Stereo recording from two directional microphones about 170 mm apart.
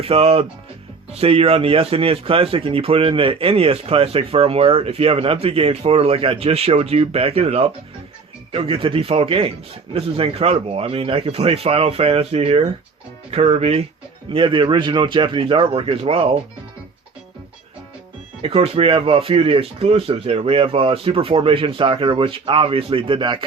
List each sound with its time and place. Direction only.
0.0 s a man's voice: 35° right (ahead or behind)
18.4 s speech: 35° right (ahead or behind)